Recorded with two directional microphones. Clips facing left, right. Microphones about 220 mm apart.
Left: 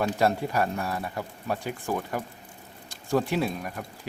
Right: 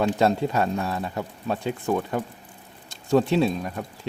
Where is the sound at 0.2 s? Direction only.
25° right (ahead or behind).